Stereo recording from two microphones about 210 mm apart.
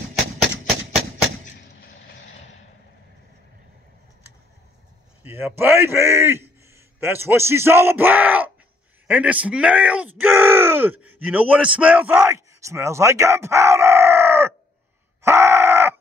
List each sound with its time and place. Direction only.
1.6 s vehicle: 50° left (ahead or behind)
5.2 s a man's voice: 10° right (ahead or behind)
15.2 s grunt: 10° right (ahead or behind)